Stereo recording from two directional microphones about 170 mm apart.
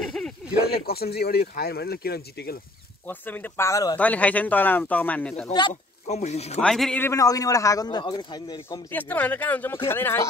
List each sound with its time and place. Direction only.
0.0 s a sound: centre (ahead or behind)
0.8 s speech: 65° left (ahead or behind)
3.1 s speech: 10° left (ahead or behind)
4.0 s speech: 10° left (ahead or behind)
6.0 s speech: 40° left (ahead or behind)
6.6 s speech: 5° left (ahead or behind)
7.0 s a man's voice: 15° left (ahead or behind)
8.9 s speech: 10° left (ahead or behind)